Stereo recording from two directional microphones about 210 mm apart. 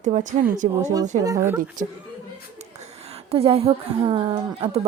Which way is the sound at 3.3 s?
25° right (ahead or behind).